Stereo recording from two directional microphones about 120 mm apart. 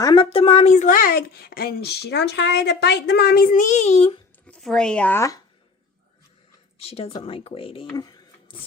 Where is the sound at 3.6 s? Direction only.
85° left; by 4.2 s 55° left (ahead or behind).